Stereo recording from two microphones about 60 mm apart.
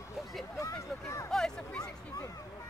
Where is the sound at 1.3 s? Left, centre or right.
Centre.